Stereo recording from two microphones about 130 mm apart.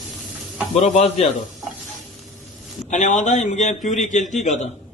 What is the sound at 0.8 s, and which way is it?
Speech, 55° left (ahead or behind).